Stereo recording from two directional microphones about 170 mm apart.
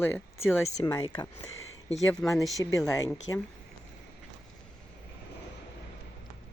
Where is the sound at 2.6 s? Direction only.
20° left (ahead or behind).